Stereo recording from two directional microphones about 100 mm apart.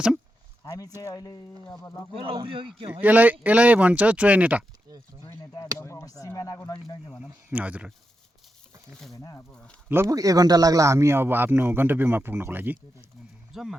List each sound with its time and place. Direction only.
0.6 s speech: 40° left (ahead or behind)
2.1 s speech: 65° right (ahead or behind)
2.9 s speech: 15° right (ahead or behind)
5.5 s speech: 30° left (ahead or behind)
7.5 s speech: 15° right (ahead or behind)
9.1 s speech: 35° left (ahead or behind)
10.1 s speech: 35° right (ahead or behind); by 13.1 s 20° right (ahead or behind)
13.5 s speech: 5° right (ahead or behind)